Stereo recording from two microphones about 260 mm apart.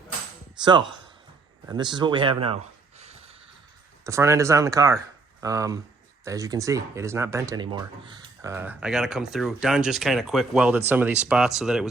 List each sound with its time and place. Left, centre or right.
0.6 s speech: centre
3.0 s a sound: right
4.0 s speech: centre